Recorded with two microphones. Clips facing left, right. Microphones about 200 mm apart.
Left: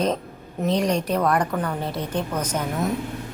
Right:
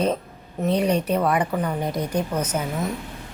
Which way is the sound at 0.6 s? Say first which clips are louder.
Right 1 dB; 5° right (ahead or behind).